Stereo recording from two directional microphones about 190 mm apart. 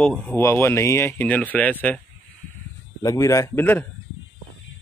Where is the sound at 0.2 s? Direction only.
10° left (ahead or behind).